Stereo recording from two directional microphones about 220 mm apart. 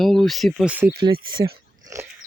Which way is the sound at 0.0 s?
Centre (ahead or behind).